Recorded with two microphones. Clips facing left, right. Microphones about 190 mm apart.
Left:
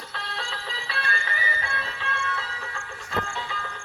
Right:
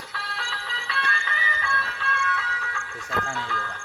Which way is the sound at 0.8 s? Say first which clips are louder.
Right 1 dB; 35° left (ahead or behind).